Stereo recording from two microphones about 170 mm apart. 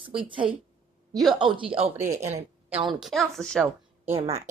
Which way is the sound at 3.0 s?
Centre (ahead or behind).